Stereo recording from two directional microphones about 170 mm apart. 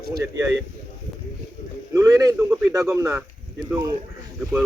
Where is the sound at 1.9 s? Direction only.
20° right (ahead or behind).